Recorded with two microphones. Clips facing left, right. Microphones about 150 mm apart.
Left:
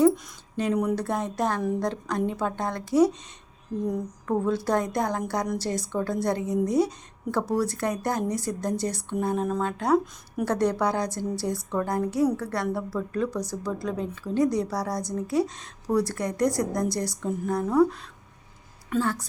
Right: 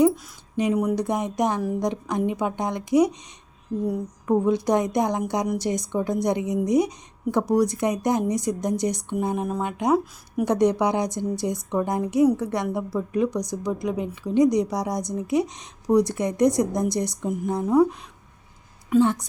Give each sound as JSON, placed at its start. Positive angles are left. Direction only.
{"t": 0.5, "sound": "a woman's voice", "side_deg": -10}